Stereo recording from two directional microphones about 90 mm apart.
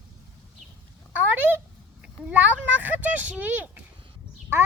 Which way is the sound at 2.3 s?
20° right (ahead or behind).